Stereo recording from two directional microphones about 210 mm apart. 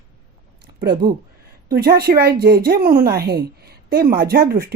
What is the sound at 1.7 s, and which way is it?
A woman's voice, 45° right (ahead or behind).